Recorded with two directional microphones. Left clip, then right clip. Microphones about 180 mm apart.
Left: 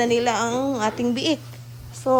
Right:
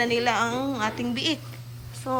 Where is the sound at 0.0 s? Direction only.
20° left (ahead or behind).